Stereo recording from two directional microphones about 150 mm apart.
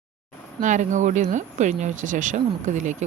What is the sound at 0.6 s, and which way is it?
Speech, 55° right (ahead or behind).